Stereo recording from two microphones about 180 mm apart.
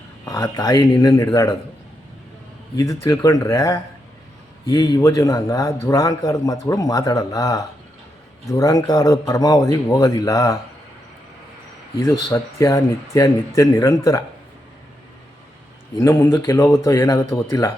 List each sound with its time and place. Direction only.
0.3 s a man's voice: 20° left (ahead or behind)
2.7 s a man's voice: 15° left (ahead or behind)
11.9 s speech: 15° left (ahead or behind)
16.0 s speech: 15° left (ahead or behind)